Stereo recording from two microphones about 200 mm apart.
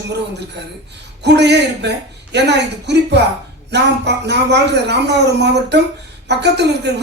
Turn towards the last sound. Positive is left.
turn(degrees=-60)  # may be behind; listen again after turning